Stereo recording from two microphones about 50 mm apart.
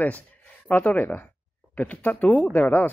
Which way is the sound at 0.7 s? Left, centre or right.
Left.